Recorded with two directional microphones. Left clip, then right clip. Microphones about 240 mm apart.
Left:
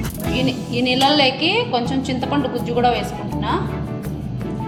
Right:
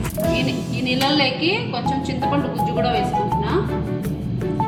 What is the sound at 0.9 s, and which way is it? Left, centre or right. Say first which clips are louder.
Speech: left 3 dB; left.